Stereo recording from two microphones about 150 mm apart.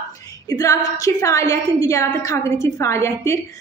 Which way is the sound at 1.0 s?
20° left (ahead or behind).